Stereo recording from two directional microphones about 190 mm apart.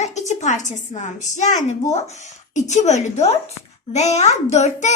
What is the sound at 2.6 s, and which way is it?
A child's voice, 35° left (ahead or behind).